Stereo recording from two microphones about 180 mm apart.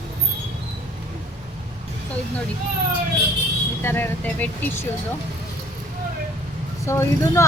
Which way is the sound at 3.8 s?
10° left (ahead or behind).